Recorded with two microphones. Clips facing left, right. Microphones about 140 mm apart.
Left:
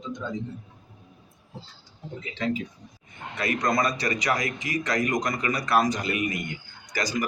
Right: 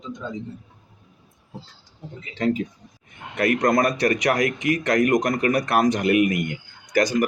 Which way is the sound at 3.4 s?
60° right (ahead or behind).